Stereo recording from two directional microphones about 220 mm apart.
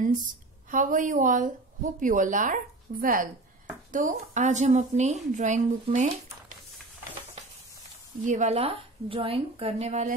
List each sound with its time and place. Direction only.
0.7 s speech: 35° right (ahead or behind)
8.3 s a woman's voice: 30° right (ahead or behind)